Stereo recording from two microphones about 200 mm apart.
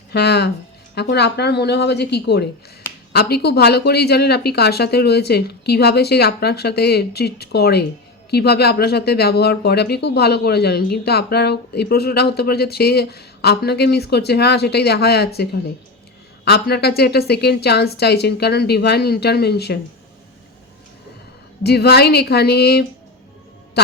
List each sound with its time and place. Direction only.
0.1 s a woman's voice: 55° left (ahead or behind)
21.6 s a woman's voice: 55° left (ahead or behind)